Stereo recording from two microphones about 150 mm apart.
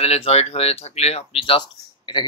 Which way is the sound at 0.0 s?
40° left (ahead or behind).